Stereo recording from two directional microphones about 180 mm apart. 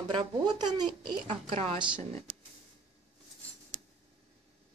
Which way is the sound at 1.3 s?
35° right (ahead or behind).